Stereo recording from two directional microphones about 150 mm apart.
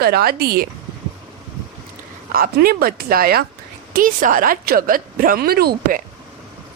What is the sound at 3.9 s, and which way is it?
A woman's voice, 65° right (ahead or behind).